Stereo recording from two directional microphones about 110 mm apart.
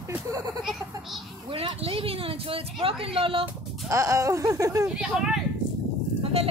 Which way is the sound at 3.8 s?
30° right (ahead or behind).